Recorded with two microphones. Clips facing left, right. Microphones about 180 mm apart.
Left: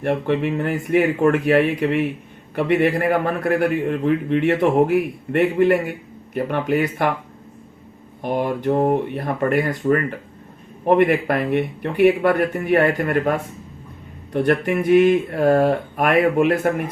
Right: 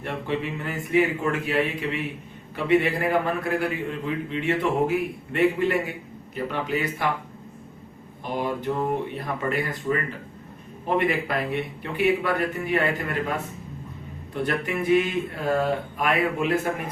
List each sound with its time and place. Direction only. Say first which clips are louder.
0.0 s a man's voice: left 8 dB; 60° left (ahead or behind)
8.2 s a man's voice: left 6 dB; 55° left (ahead or behind)
14.3 s a man's voice: left 8 dB; 55° left (ahead or behind)